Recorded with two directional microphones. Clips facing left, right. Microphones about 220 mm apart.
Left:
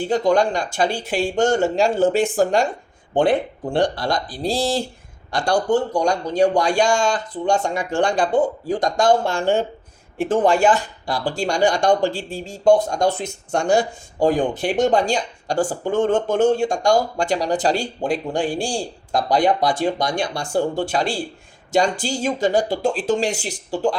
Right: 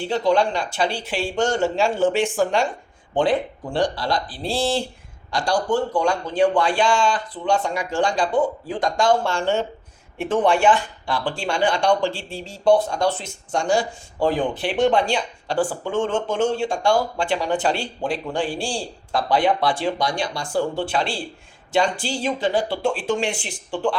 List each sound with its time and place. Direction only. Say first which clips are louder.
0.0 s speech: left 2 dB; 45° left (ahead or behind)
3.2 s speech: left 2 dB; 60° left (ahead or behind); by 4.9 s 40° left (ahead or behind)
5.3 s a man's voice: left 2 dB; 60° left (ahead or behind)
6.0 s a man's voice: left 2 dB; 40° left (ahead or behind); by 8.4 s 55° left (ahead or behind)
8.6 s speech: left 2 dB; 40° left (ahead or behind)
10.2 s speech: left 2 dB; 40° left (ahead or behind); by 13.8 s 60° left (ahead or behind)
14.2 s speech: left 3 dB; 45° left (ahead or behind)
15.9 s speech: left 4 dB; 55° left (ahead or behind)